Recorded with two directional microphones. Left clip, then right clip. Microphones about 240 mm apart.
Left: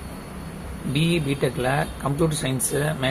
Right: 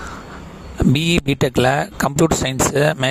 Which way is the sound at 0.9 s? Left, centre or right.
Right.